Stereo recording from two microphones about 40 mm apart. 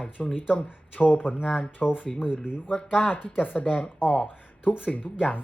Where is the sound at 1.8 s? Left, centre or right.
Left.